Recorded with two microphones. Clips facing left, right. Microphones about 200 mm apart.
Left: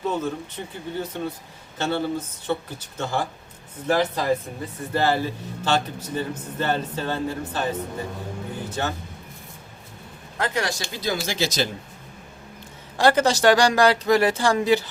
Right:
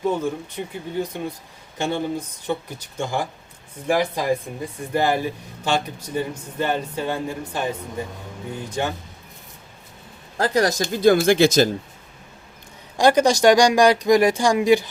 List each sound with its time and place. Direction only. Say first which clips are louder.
0.0 s speech: right 3 dB; 10° right (ahead or behind)
8.8 s speech: right 3 dB; 15° right (ahead or behind)
10.3 s speech: right 6 dB; 35° right (ahead or behind); by 11.7 s 50° right (ahead or behind)
13.0 s speech: right 3 dB; 15° right (ahead or behind)